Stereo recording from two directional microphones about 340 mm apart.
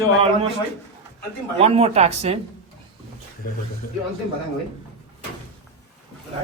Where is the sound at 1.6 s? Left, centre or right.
Centre.